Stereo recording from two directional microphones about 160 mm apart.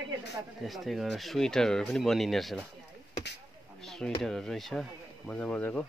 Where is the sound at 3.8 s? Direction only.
5° left (ahead or behind).